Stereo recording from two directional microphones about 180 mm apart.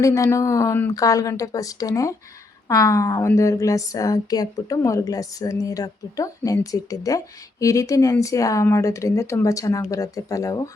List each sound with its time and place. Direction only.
0.0 s speech: 15° left (ahead or behind)